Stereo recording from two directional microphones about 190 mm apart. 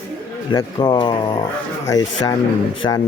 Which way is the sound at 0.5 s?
25° left (ahead or behind).